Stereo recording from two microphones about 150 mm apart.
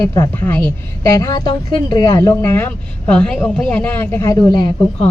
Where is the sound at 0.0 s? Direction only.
20° left (ahead or behind).